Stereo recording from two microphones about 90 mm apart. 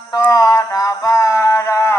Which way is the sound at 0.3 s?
40° left (ahead or behind).